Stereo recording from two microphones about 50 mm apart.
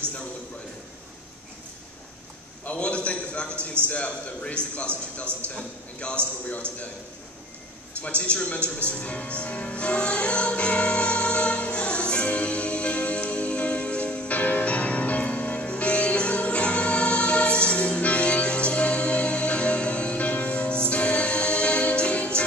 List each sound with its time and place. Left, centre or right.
2.6 s a man's voice: left
8.0 s music: left